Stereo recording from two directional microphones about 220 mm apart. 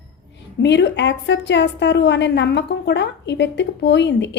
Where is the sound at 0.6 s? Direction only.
55° left (ahead or behind).